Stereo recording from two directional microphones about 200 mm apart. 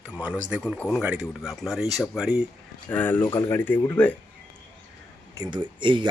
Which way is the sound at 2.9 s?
10° left (ahead or behind).